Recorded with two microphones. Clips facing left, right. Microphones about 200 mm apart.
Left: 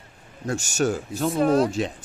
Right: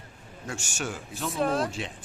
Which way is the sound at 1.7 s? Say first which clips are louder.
Left 9 dB; 40° left (ahead or behind).